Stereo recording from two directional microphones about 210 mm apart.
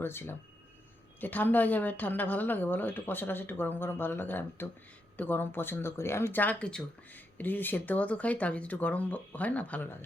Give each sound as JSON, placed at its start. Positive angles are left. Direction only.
{"t": 0.0, "sound": "speech", "side_deg": 10}